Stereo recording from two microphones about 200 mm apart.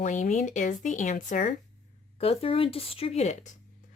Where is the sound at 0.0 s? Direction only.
40° left (ahead or behind).